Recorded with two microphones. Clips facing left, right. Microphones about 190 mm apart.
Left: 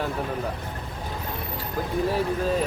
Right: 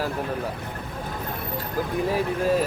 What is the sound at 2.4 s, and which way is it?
Speech, 10° right (ahead or behind).